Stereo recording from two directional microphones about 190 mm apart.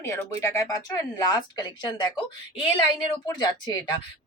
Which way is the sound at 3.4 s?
20° left (ahead or behind).